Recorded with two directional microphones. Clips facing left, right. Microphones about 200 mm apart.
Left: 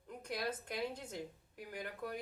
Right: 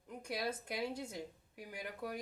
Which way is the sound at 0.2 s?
10° right (ahead or behind).